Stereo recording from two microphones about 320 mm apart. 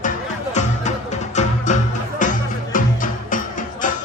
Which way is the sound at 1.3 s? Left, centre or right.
Left.